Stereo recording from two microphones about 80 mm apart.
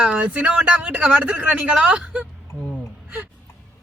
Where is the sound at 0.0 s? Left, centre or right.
Centre.